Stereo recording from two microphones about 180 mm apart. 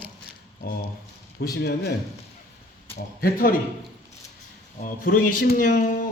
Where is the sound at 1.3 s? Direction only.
60° left (ahead or behind).